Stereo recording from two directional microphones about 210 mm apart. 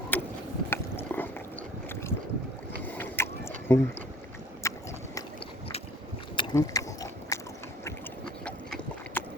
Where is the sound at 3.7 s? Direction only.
10° left (ahead or behind).